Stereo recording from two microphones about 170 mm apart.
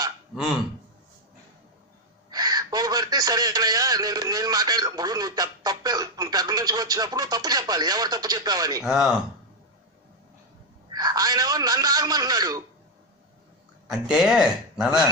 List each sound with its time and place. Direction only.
2.3 s a man's voice: 20° right (ahead or behind)
8.8 s speech: 5° right (ahead or behind)
10.9 s a man's voice: 20° right (ahead or behind)
13.8 s speech: 5° right (ahead or behind)